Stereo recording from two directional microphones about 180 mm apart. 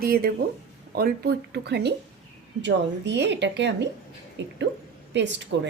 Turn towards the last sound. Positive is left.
turn(degrees=-75)  # may be behind; listen again after turning